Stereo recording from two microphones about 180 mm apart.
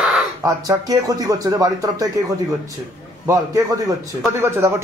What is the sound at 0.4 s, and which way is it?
Speech, 20° right (ahead or behind).